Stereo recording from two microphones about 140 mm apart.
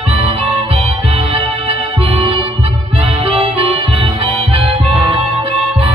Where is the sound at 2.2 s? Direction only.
40° right (ahead or behind).